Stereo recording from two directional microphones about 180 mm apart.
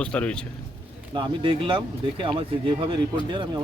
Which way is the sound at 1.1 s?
30° right (ahead or behind).